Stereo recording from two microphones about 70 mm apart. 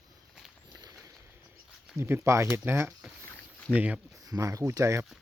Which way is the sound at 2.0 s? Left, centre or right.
Right.